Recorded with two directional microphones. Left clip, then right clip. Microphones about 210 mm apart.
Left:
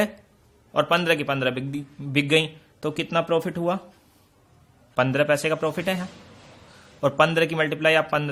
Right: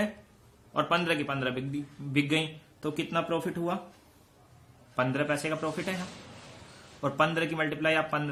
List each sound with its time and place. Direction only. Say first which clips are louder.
0.7 s speech: left 7 dB; 50° left (ahead or behind)
4.9 s speech: left 8 dB; 50° left (ahead or behind)
7.0 s speech: left 8 dB; 50° left (ahead or behind)